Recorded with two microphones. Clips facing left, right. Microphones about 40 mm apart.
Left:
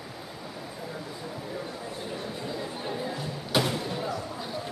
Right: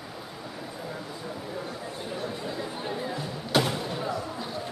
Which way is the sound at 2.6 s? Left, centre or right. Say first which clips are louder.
Right 1 dB; centre.